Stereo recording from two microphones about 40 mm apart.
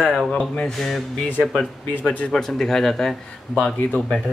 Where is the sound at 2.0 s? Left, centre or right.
Left.